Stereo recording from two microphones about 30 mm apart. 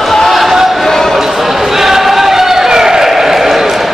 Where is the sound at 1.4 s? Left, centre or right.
Centre.